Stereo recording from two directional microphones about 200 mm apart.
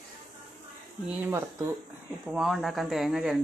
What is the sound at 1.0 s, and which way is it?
A woman's voice, 10° right (ahead or behind).